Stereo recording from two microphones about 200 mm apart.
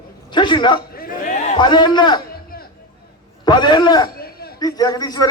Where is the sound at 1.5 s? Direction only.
25° left (ahead or behind).